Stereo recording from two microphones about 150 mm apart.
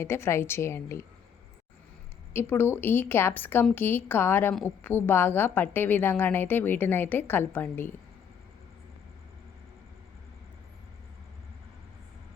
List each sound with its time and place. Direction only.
0.0 s a woman's voice: 15° left (ahead or behind)
2.3 s a woman's voice: 15° left (ahead or behind)